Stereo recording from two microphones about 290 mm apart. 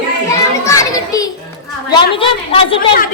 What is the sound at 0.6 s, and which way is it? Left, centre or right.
Children playing, centre.